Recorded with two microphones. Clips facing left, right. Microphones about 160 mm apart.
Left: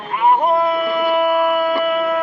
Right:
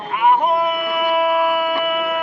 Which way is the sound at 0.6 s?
10° right (ahead or behind).